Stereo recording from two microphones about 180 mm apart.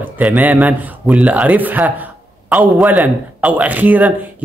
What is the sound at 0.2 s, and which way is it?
Speech, 10° right (ahead or behind).